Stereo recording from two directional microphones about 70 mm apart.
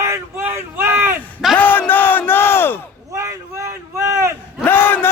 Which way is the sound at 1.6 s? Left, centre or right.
Left.